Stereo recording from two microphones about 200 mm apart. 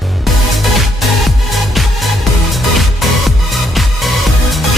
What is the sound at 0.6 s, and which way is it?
Music, centre (ahead or behind).